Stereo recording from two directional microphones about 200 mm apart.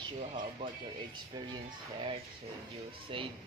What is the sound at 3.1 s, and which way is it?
Speech, 25° right (ahead or behind).